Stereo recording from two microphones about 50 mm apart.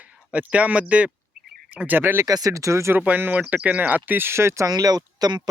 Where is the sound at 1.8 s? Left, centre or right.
Right.